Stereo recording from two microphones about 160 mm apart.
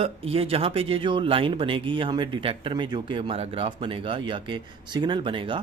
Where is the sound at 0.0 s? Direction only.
35° right (ahead or behind).